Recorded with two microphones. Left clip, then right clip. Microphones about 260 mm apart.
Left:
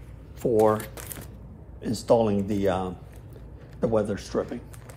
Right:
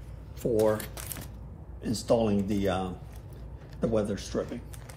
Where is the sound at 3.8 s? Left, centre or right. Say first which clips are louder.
Left 4 dB; left.